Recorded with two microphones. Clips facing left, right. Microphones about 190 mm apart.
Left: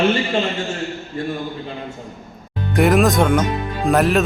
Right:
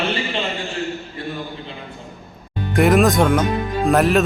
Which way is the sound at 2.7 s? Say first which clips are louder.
Even; centre (ahead or behind).